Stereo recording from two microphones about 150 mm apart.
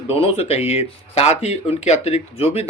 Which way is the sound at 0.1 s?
40° left (ahead or behind).